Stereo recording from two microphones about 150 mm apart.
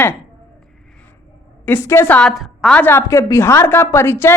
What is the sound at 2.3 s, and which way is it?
A woman's voice, centre (ahead or behind).